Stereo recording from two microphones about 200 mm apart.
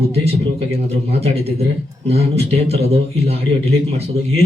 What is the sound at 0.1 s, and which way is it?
A man's voice, 30° right (ahead or behind).